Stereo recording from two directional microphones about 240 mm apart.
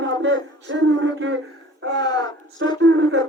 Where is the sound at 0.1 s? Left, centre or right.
Right.